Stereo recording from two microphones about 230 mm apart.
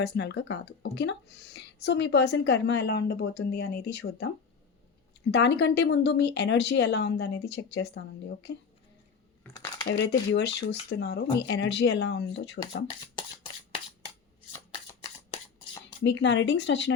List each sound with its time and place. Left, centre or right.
0.0 s speech: left
5.3 s speech: left
9.5 s speech: centre
9.8 s speech: left
14.5 s shuffling cards: centre
16.0 s speech: left